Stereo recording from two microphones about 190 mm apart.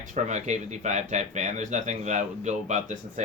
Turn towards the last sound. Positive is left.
turn(degrees=-40)  # may be behind; listen again after turning